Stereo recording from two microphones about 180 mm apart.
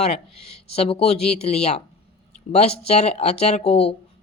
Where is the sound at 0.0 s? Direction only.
35° left (ahead or behind).